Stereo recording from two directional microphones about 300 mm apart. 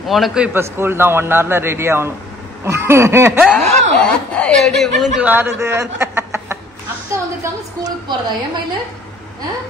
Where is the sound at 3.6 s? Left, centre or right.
Right.